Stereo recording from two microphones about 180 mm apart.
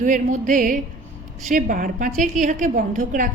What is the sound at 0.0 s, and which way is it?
A woman's voice, 45° right (ahead or behind).